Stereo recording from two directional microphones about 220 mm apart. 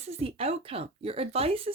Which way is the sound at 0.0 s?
25° right (ahead or behind).